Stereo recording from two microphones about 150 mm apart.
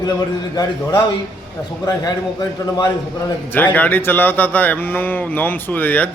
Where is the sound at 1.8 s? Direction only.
25° left (ahead or behind).